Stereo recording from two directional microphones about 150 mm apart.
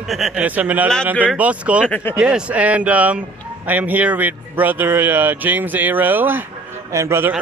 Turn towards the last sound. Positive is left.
turn(degrees=-15)  # may be behind; listen again after turning